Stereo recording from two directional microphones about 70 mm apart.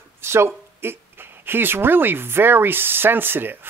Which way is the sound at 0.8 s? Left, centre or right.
Right.